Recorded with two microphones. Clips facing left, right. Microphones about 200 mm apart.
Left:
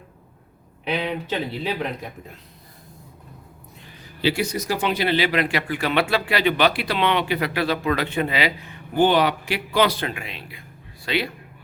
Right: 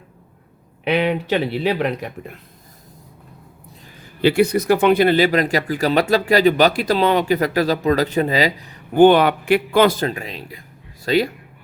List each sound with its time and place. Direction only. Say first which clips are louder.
0.9 s speech: right 7 dB; 70° right (ahead or behind)
4.2 s speech: right 8 dB; 55° right (ahead or behind); by 8.8 s 40° right (ahead or behind)
9.0 s a man's voice: right 7 dB; 55° right (ahead or behind)